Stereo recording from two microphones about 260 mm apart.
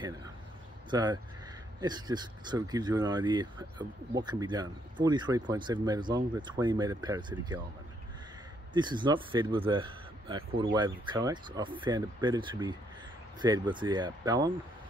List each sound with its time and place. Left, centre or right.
0.8 s speech: centre
8.7 s speech: centre